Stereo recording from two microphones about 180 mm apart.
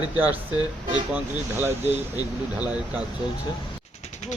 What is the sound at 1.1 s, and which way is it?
Speech, 10° right (ahead or behind).